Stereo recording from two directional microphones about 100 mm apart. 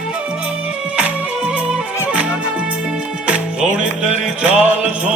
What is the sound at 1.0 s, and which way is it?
Music, 10° right (ahead or behind).